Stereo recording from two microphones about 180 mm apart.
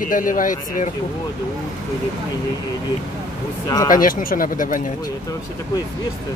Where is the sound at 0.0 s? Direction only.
50° left (ahead or behind).